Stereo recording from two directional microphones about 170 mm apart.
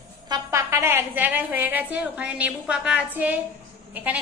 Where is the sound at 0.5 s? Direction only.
15° right (ahead or behind).